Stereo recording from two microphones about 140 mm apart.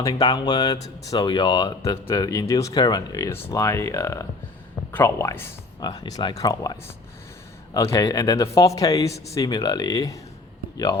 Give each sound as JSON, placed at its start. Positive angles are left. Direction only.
{"t": 0.0, "sound": "speech", "side_deg": 30}
{"t": 5.8, "sound": "speech", "side_deg": 30}